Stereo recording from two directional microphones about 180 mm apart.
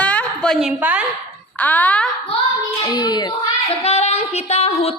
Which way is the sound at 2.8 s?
25° left (ahead or behind).